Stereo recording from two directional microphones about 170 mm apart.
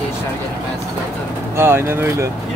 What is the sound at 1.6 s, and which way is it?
Speech, 15° right (ahead or behind).